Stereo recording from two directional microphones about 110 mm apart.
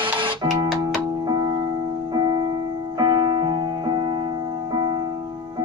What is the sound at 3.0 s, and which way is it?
Music, 40° right (ahead or behind).